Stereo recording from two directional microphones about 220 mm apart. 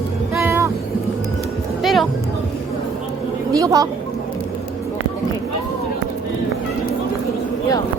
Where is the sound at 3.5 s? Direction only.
15° right (ahead or behind).